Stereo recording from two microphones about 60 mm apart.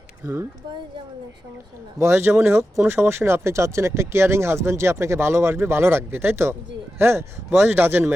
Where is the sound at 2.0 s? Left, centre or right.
Right.